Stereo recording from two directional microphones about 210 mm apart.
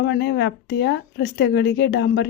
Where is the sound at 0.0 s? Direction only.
55° left (ahead or behind).